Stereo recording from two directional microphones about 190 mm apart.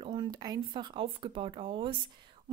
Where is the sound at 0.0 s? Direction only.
25° right (ahead or behind).